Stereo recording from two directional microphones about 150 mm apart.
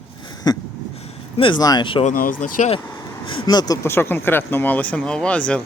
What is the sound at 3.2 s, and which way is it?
Speech, 35° left (ahead or behind).